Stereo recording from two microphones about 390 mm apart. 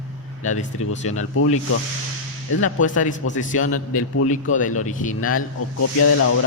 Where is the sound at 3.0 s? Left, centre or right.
Centre.